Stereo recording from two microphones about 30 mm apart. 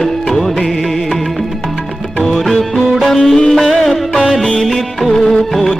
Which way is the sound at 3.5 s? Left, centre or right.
Centre.